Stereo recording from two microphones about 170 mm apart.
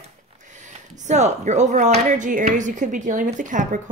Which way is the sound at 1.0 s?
45° right (ahead or behind).